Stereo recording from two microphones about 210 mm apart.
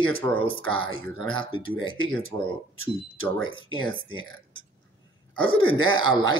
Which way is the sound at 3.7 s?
75° right (ahead or behind).